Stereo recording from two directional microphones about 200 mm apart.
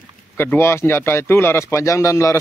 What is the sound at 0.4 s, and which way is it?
Speech, 10° left (ahead or behind).